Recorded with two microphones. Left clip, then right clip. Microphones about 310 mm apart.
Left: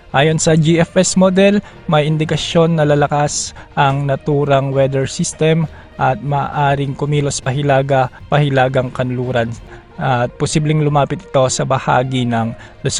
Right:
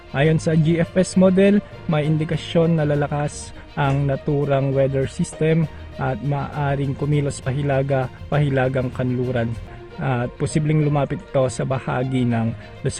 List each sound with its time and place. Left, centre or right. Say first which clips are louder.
0.1 s a man's voice: left 7 dB; left